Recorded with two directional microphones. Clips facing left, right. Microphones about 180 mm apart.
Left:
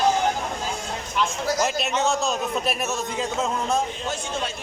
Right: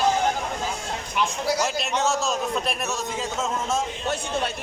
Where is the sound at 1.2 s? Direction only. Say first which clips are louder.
Even; 10° right (ahead or behind).